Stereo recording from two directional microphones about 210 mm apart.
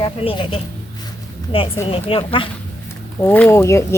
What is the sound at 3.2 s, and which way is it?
Speech, 10° left (ahead or behind).